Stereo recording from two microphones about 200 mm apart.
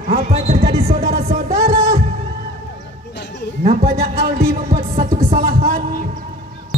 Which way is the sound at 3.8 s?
50° right (ahead or behind).